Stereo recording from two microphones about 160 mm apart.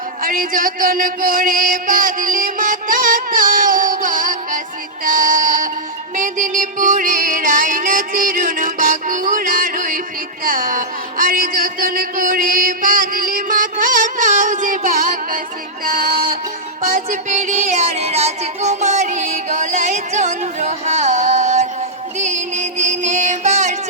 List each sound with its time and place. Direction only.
0.2 s music: 60° right (ahead or behind)
16.8 s music: 50° right (ahead or behind)